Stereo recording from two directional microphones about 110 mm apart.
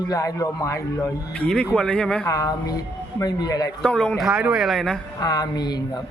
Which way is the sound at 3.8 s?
10° left (ahead or behind).